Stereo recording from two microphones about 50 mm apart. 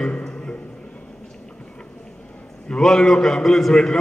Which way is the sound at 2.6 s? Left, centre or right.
Centre.